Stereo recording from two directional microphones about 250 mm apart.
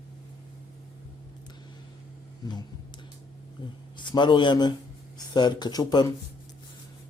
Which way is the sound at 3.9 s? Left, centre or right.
Centre.